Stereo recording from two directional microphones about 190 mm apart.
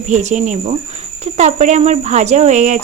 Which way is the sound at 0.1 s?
40° right (ahead or behind).